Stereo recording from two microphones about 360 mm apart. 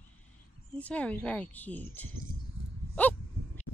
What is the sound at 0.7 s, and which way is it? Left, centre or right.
Speech, centre.